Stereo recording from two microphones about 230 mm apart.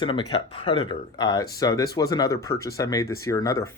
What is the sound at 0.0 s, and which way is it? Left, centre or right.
Speech, left.